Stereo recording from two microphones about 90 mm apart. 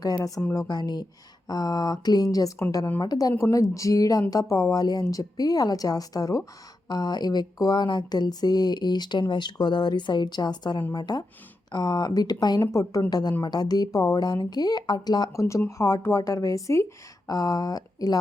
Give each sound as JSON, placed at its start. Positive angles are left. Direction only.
{"t": 0.0, "sound": "speech", "side_deg": 40}
{"t": 3.3, "sound": "speech", "side_deg": 35}
{"t": 12.7, "sound": "speech", "side_deg": 40}
{"t": 13.1, "sound": "speech", "side_deg": 50}
{"t": 15.3, "sound": "speech", "side_deg": 35}